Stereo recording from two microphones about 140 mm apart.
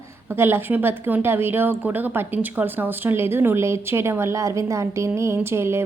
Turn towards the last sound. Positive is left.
turn(degrees=-20)  # may be behind; listen again after turning